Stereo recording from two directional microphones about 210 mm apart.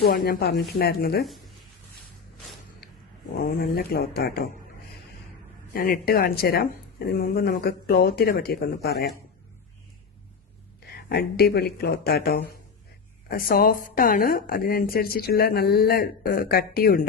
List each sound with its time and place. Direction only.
0.0 s a woman's voice: 45° left (ahead or behind)
3.3 s a woman's voice: 45° left (ahead or behind)
5.7 s a woman's voice: 45° left (ahead or behind)
11.1 s a woman's voice: 50° left (ahead or behind)